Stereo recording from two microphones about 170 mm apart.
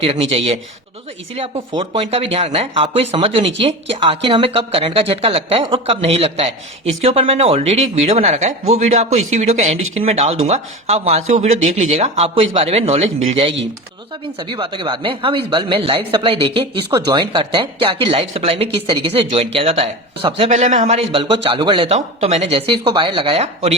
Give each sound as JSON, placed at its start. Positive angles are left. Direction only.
{"t": 0.0, "sound": "speech", "side_deg": -35}